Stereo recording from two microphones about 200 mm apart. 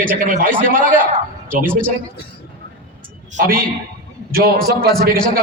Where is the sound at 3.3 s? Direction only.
40° right (ahead or behind).